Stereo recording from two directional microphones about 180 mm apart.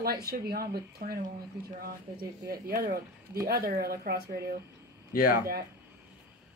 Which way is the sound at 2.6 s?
55° right (ahead or behind).